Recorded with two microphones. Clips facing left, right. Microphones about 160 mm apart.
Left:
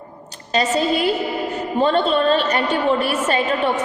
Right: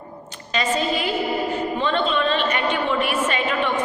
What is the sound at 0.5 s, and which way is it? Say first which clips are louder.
A woman's voice: left 4 dB; 40° left (ahead or behind).